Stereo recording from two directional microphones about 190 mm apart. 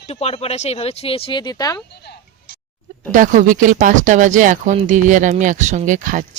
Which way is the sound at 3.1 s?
45° right (ahead or behind).